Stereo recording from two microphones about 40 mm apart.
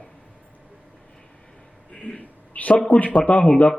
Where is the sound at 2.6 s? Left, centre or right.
Left.